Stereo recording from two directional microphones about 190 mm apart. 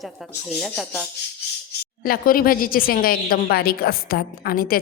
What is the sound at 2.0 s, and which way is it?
Speech, 50° left (ahead or behind).